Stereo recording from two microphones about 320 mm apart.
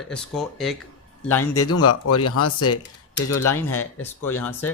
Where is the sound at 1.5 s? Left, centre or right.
Left.